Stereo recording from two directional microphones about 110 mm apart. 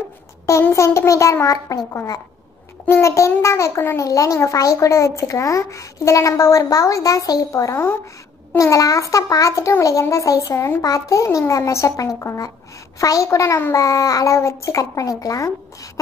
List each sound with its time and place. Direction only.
0.5 s a child's voice: 25° left (ahead or behind)
2.9 s a child's voice: 25° left (ahead or behind)